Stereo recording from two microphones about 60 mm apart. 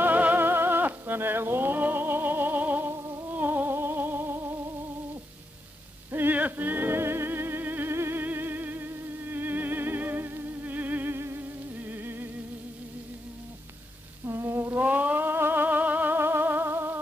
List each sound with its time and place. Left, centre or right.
0.0 s music: right
6.1 s music: right
14.2 s humming: right
14.8 s music: right